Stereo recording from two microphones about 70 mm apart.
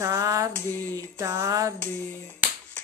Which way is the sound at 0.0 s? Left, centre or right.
Right.